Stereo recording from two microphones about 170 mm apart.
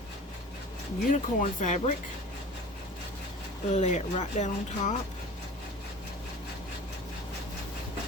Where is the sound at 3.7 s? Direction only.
45° left (ahead or behind).